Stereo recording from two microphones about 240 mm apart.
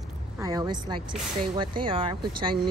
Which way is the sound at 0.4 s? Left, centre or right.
Centre.